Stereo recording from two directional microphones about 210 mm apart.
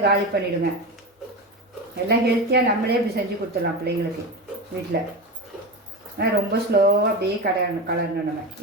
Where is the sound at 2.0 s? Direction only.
50° right (ahead or behind).